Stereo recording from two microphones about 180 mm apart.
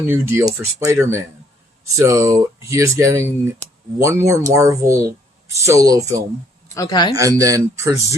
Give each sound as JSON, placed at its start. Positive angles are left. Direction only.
{"t": 0.1, "sound": "speech", "side_deg": -15}
{"t": 6.7, "sound": "speech", "side_deg": 20}
{"t": 7.2, "sound": "speech", "side_deg": -20}